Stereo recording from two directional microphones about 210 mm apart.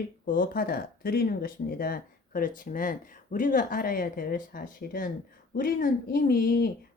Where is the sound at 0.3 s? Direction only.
40° left (ahead or behind).